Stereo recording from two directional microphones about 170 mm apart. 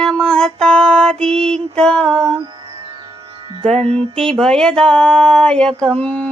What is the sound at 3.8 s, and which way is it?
Mantra, 35° right (ahead or behind).